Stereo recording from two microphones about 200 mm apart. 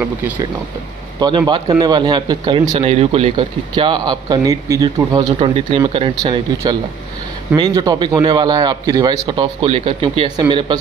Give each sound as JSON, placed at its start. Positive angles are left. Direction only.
{"t": 0.0, "sound": "a man's voice", "side_deg": -10}
{"t": 2.7, "sound": "a man's voice", "side_deg": -35}
{"t": 7.5, "sound": "a man's voice", "side_deg": -20}